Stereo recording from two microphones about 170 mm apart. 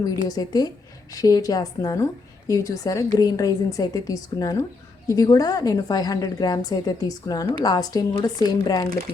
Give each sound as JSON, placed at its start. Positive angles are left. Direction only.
{"t": 0.0, "sound": "a woman's voice", "side_deg": 20}